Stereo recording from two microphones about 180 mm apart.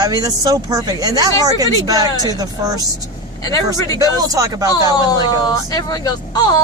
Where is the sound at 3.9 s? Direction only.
20° right (ahead or behind).